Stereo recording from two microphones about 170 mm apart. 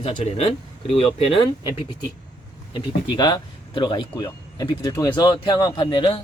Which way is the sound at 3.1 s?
25° left (ahead or behind).